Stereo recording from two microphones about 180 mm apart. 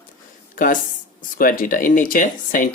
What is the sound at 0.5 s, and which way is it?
Speech, 50° left (ahead or behind).